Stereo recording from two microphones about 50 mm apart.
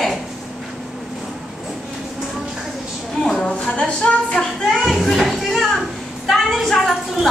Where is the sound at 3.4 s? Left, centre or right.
Centre.